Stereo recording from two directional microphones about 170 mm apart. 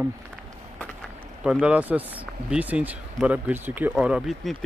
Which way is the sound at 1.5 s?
10° right (ahead or behind).